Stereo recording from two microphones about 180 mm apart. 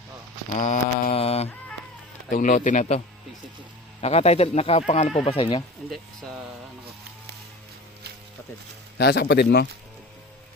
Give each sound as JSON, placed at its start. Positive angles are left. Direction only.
{"t": 0.6, "sound": "mantra", "side_deg": 40}
{"t": 2.3, "sound": "speech", "side_deg": 50}
{"t": 4.0, "sound": "speech", "side_deg": 35}
{"t": 9.0, "sound": "a man's voice", "side_deg": 70}